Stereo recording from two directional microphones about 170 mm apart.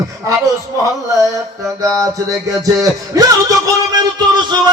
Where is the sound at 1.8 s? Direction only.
20° right (ahead or behind).